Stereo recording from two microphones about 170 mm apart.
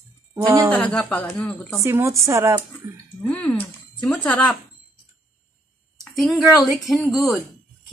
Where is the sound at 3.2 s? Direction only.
10° left (ahead or behind).